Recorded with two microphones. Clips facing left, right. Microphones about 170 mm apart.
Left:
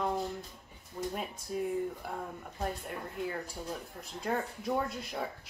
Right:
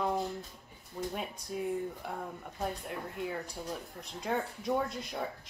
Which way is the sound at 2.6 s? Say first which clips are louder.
Even; centre (ahead or behind).